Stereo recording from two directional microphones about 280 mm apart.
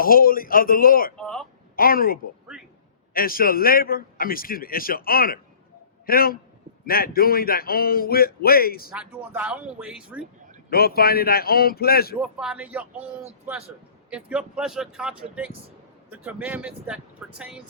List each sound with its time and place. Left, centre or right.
0.0 s a man's voice: left
1.1 s a sound: centre
1.7 s a woman's voice: left
8.9 s speech: centre
10.7 s a man's voice: left
12.2 s speech: centre
14.1 s speech: centre